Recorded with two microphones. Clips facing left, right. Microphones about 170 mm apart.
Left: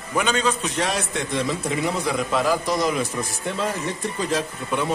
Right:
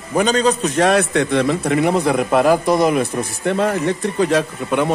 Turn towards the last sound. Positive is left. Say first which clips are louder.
# right 6 dB
turn(degrees=-65)  # may be behind; listen again after turning